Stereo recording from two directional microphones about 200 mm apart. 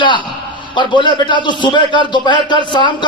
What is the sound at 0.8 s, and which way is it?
Speech, 25° left (ahead or behind).